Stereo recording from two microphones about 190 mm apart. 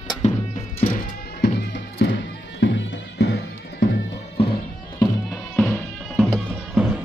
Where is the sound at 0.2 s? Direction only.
35° left (ahead or behind).